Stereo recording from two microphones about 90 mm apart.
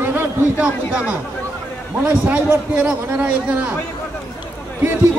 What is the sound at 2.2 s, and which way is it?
A man's voice, 15° right (ahead or behind).